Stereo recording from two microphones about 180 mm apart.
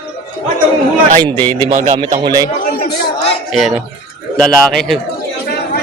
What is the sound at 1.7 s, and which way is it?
Speech, 45° right (ahead or behind).